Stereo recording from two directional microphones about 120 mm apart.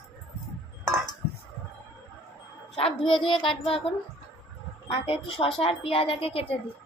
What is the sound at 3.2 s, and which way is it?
A woman's voice, 45° left (ahead or behind).